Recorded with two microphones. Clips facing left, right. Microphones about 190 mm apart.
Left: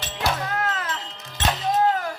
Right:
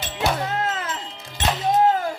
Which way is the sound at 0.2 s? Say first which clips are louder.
Right 2 dB; 25° right (ahead or behind).